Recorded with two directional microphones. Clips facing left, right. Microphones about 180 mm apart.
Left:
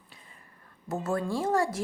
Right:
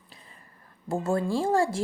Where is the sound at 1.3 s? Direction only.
30° right (ahead or behind).